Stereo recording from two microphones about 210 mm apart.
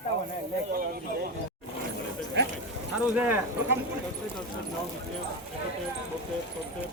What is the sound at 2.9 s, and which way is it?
Speech, 5° right (ahead or behind).